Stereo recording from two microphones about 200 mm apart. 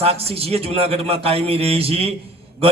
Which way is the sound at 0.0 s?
30° right (ahead or behind).